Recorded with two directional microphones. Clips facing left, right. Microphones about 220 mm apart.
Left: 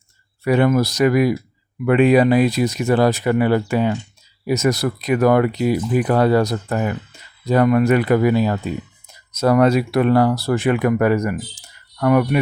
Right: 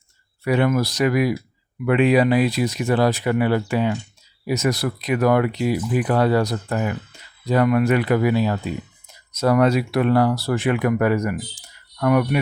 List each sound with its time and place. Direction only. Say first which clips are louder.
0.4 s speech: left 3 dB; 45° left (ahead or behind)